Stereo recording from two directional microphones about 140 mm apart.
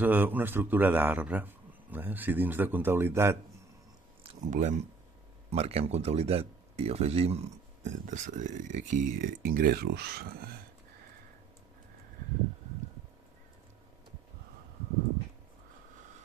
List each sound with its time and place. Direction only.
0.0 s a man's voice: 10° right (ahead or behind)
4.5 s speech: 60° right (ahead or behind)
5.5 s speech: 45° right (ahead or behind); by 10.5 s 90° right